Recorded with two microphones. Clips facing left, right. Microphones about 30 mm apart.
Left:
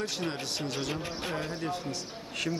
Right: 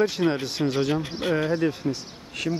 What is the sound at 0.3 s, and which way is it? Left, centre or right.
Speech, centre.